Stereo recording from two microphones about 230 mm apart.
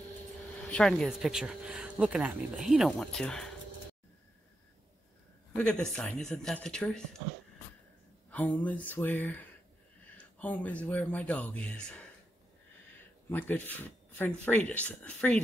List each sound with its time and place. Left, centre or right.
0.7 s speech: centre
5.5 s speech: centre
8.3 s speech: centre